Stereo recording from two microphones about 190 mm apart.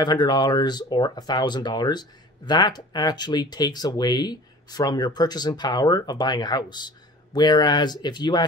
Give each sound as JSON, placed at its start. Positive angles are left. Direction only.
{"t": 0.0, "sound": "speech", "side_deg": 25}